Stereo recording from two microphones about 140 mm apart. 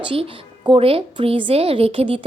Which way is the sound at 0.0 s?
40° right (ahead or behind).